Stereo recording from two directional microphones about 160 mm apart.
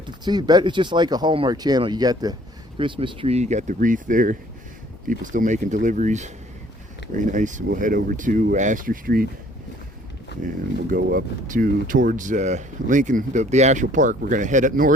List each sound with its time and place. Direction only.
0.3 s speech: 25° right (ahead or behind); by 9.2 s 60° right (ahead or behind)
10.8 s speech: 65° right (ahead or behind)